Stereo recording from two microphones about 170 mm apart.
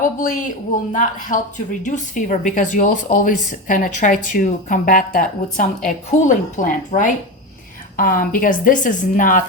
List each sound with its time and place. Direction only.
0.0 s a woman's voice: 50° left (ahead or behind)